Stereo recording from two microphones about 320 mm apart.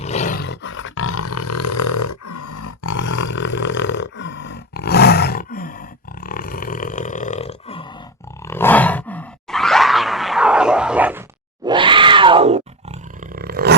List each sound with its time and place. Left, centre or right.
0.0 s roar: left
3.2 s roar: left
6.1 s burping: left
8.4 s groan: centre
11.6 s roar: centre